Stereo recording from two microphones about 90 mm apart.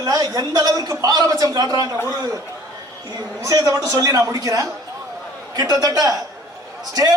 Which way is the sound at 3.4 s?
40° right (ahead or behind).